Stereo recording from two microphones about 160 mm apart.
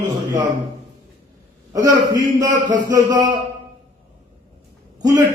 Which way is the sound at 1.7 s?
20° right (ahead or behind).